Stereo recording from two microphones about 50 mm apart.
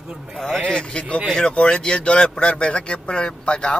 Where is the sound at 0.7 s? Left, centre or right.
Centre.